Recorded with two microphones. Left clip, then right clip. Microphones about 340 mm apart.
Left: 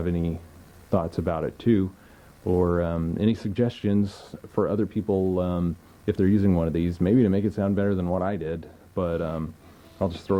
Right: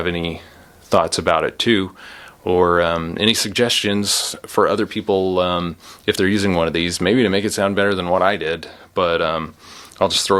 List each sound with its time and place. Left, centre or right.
0.0 s speech: centre
5.0 s speech: right
5.4 s speech: centre